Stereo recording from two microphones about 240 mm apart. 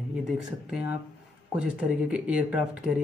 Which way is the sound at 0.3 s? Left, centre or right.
Centre.